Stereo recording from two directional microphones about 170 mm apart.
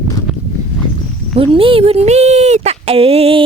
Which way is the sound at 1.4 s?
30° right (ahead or behind).